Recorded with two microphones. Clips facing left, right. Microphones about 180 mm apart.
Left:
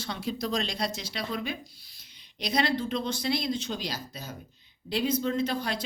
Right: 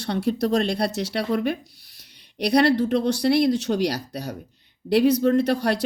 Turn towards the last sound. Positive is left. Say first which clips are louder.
# right 9 dB
turn(degrees=-70)  # may be behind; listen again after turning